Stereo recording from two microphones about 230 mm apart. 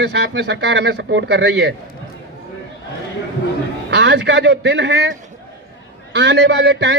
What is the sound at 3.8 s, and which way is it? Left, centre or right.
A man's voice, right.